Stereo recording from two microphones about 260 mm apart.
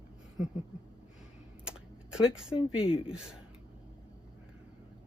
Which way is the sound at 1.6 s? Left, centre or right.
Centre.